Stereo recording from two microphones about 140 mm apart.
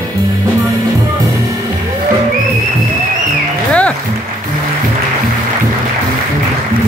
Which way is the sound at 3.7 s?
10° left (ahead or behind).